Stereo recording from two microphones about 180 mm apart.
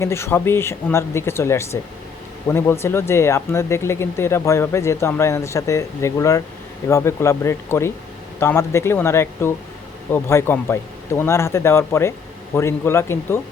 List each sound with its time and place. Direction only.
0.0 s speech: 15° left (ahead or behind)